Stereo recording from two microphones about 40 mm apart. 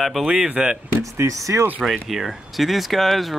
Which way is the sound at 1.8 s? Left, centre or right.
Centre.